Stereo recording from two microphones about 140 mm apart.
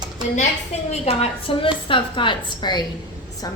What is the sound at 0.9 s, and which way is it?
A woman's voice, 45° left (ahead or behind).